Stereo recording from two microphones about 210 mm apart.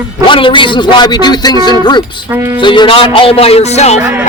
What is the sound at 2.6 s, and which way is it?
Speech, 20° left (ahead or behind).